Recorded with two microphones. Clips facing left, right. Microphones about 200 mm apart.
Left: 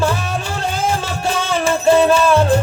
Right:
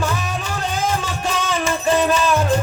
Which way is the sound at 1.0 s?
30° left (ahead or behind).